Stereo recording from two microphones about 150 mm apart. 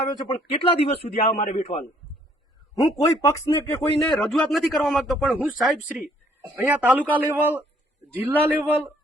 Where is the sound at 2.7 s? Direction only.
25° left (ahead or behind).